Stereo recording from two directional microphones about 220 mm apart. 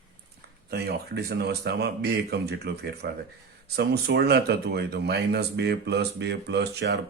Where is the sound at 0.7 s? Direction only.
45° right (ahead or behind).